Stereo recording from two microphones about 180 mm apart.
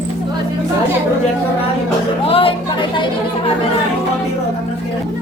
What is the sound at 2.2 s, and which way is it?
Music, 30° left (ahead or behind).